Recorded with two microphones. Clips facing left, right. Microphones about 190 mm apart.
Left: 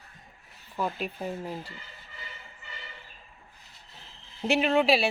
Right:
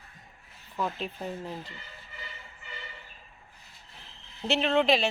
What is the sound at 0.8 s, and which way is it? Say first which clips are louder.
Speech: left 1 dB; 10° left (ahead or behind).